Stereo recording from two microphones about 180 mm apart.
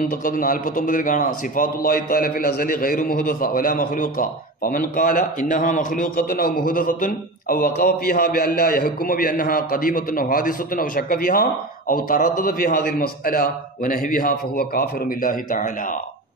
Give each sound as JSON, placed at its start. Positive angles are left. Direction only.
{"t": 0.0, "sound": "a man's voice", "side_deg": 50}